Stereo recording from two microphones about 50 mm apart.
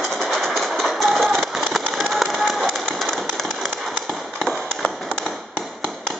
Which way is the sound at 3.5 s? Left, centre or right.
Centre.